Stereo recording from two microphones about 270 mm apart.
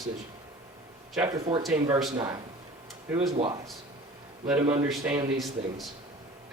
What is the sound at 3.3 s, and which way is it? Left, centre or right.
Speech, centre.